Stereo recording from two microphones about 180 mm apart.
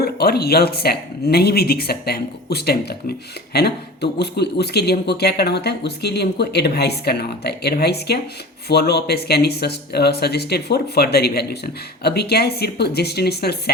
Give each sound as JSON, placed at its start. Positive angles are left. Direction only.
{"t": 0.0, "sound": "speech", "side_deg": 60}